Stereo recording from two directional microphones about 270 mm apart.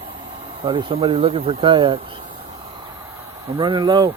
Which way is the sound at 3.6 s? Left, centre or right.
Centre.